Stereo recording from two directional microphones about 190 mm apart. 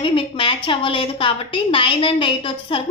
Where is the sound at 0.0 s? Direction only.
25° left (ahead or behind).